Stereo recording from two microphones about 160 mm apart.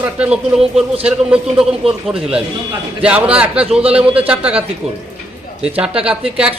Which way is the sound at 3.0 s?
10° right (ahead or behind).